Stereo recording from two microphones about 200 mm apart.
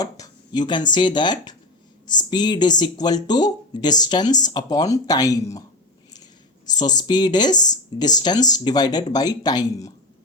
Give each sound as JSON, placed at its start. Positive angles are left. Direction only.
{"t": 0.0, "sound": "speech", "side_deg": 20}
{"t": 6.7, "sound": "speech", "side_deg": 20}